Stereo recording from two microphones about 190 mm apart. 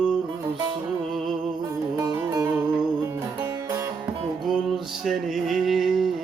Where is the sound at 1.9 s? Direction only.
15° right (ahead or behind).